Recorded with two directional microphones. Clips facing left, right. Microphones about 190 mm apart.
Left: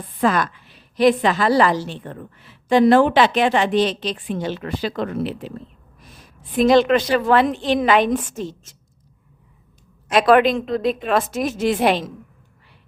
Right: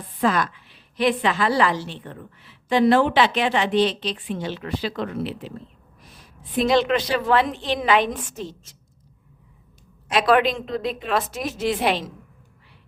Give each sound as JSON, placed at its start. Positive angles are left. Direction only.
{"t": 0.2, "sound": "a woman's voice", "side_deg": 50}
{"t": 6.7, "sound": "a woman's voice", "side_deg": 50}
{"t": 10.1, "sound": "a woman's voice", "side_deg": 50}